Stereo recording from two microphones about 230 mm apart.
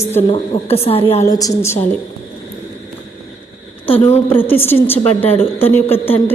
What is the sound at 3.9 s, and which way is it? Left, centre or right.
Speech, left.